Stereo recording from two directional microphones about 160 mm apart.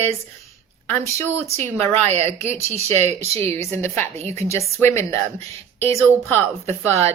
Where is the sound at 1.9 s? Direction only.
40° right (ahead or behind).